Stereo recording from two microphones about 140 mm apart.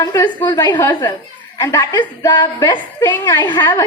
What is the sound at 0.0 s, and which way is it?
A woman's voice, 25° left (ahead or behind).